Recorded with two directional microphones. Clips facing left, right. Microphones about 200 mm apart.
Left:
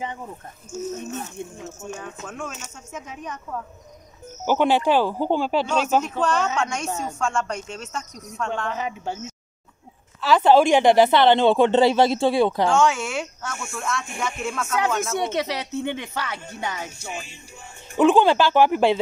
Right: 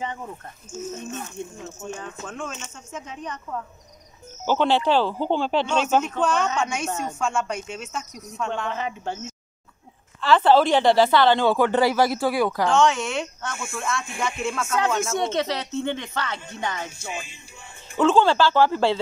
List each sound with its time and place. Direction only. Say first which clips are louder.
1.4 s speech: even; 15° left (ahead or behind)
2.2 s speech: right 1 dB; 5° left (ahead or behind)
4.5 s speech: left 1 dB; 15° left (ahead or behind)
10.2 s speech: left 1 dB; 10° left (ahead or behind)
12.6 s speech: even; 10° left (ahead or behind)
17.9 s speech: left 2 dB; 15° left (ahead or behind)